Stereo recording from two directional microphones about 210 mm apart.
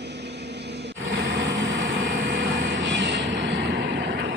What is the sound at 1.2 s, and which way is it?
Vehicle, 60° right (ahead or behind).